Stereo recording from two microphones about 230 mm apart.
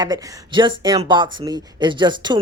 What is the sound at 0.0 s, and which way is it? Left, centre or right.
A man's voice, centre.